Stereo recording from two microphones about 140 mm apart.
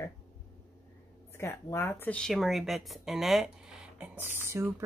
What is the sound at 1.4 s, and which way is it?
Speech, 20° left (ahead or behind).